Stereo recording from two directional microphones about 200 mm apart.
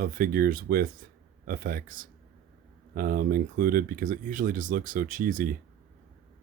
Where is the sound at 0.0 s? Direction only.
45° right (ahead or behind).